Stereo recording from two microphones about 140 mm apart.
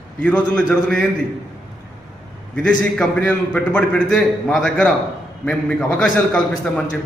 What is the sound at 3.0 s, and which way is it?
A man's voice, 10° left (ahead or behind).